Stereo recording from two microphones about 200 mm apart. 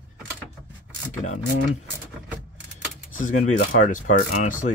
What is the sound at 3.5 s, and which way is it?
Speech, 45° left (ahead or behind).